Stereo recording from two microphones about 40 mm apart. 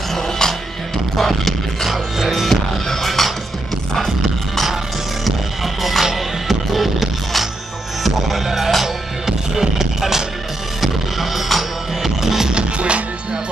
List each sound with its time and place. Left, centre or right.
0.1 s music: centre
1.9 s music: centre
2.5 s music: centre
5.2 s music: centre
12.5 s music: right